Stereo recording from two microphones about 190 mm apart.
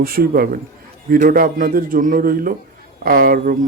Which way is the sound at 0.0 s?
50° right (ahead or behind).